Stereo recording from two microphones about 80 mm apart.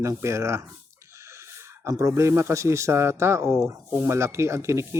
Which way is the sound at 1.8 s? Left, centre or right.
Right.